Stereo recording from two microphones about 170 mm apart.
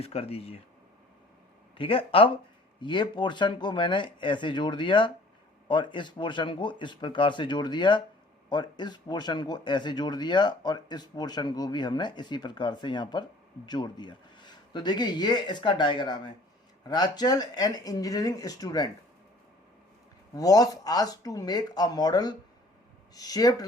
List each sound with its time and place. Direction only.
0.0 s speech: 35° left (ahead or behind)
1.8 s speech: 30° left (ahead or behind)
20.3 s speech: 20° left (ahead or behind)